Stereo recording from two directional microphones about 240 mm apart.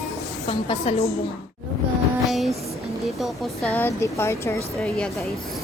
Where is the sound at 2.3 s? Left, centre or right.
Centre.